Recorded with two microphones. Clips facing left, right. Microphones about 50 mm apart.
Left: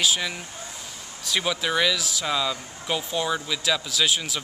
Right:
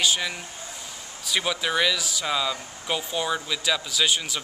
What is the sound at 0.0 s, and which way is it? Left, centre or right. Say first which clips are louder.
Speech: even; centre.